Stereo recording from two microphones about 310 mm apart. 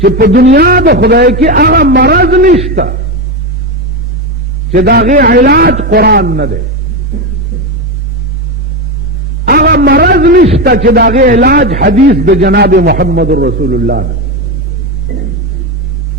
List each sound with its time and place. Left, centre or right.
0.0 s a man's voice: right
4.7 s a man's voice: right
9.5 s a man's voice: right
15.1 s rumble: right